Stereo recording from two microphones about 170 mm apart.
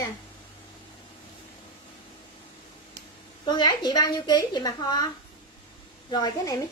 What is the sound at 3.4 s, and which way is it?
A woman's voice, 25° left (ahead or behind).